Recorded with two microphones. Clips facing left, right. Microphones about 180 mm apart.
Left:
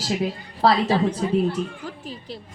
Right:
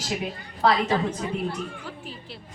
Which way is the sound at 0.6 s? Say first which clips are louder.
Left 3 dB; 35° left (ahead or behind).